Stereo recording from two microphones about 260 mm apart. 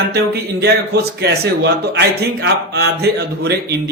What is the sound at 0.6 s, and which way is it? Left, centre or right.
A man's voice, right.